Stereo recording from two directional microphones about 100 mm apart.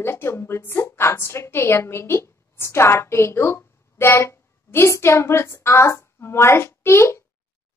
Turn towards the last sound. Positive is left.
turn(degrees=25)  # may be behind; listen again after turning